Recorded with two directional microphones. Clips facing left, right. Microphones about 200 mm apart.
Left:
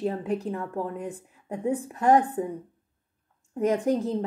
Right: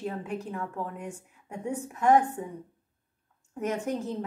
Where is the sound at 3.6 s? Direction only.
35° left (ahead or behind).